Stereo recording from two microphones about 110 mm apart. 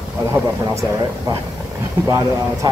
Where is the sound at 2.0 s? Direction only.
25° right (ahead or behind).